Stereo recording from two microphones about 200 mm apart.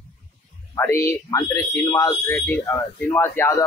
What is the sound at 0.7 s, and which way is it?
Speech, 15° left (ahead or behind).